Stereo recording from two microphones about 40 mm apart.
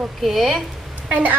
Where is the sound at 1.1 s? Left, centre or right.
Right.